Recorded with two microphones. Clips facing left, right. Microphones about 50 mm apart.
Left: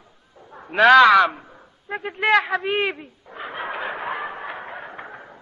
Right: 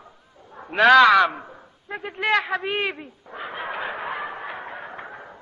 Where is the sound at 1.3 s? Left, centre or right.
Right.